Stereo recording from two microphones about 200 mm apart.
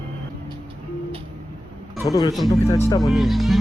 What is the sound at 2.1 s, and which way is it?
Speech, 20° left (ahead or behind).